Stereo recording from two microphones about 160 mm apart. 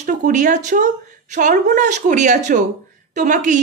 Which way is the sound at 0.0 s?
50° right (ahead or behind).